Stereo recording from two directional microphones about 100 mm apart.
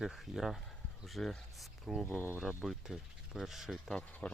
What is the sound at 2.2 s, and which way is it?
Speech, 20° left (ahead or behind).